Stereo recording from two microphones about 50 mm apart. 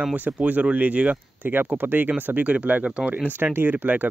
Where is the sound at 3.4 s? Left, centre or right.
Right.